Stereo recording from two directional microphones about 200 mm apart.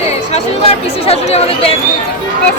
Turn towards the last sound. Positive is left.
turn(degrees=30)  # may be behind; listen again after turning